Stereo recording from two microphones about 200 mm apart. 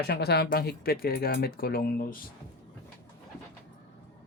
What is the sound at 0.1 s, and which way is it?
Speech, 55° left (ahead or behind).